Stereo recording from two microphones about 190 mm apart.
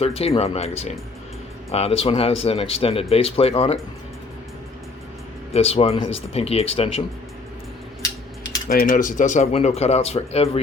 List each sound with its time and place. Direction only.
0.0 s speech: 30° left (ahead or behind)
5.5 s speech: 30° left (ahead or behind)
8.7 s speech: 50° left (ahead or behind); by 10.6 s 30° left (ahead or behind)